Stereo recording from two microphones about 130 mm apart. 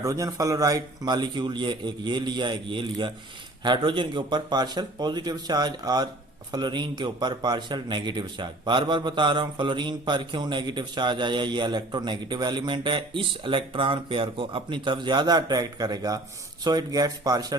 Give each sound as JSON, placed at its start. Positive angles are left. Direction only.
{"t": 0.0, "sound": "a man's voice", "side_deg": -25}